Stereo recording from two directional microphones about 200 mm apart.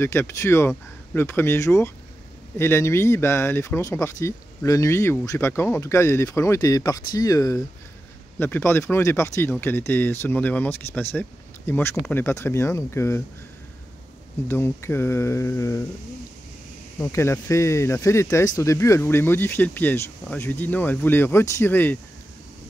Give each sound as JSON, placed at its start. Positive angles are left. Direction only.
{"t": 0.0, "sound": "speech", "side_deg": 10}
{"t": 14.5, "sound": "speech", "side_deg": 10}
{"t": 17.0, "sound": "speech", "side_deg": 15}